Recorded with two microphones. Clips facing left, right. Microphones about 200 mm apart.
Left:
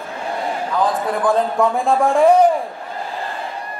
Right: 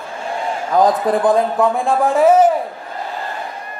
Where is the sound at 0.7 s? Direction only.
45° right (ahead or behind).